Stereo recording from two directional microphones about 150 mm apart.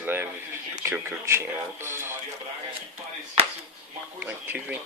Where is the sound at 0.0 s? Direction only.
15° right (ahead or behind).